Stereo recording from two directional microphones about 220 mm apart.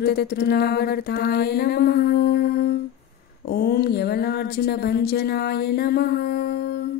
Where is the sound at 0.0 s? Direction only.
45° left (ahead or behind).